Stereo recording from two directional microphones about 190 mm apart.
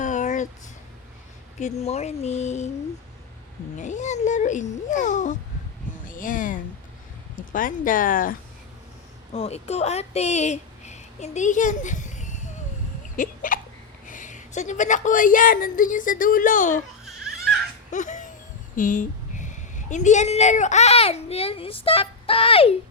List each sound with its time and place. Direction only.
0.0 s a sound: 40° left (ahead or behind)
1.5 s speech: 35° left (ahead or behind)
3.8 s a woman's voice: 40° left (ahead or behind)
9.3 s speech: 35° left (ahead or behind)
13.1 s hiccup: 45° left (ahead or behind)
14.1 s a woman's voice: 40° left (ahead or behind)
17.9 s laughter: 40° left (ahead or behind)
18.8 s speech: 45° left (ahead or behind)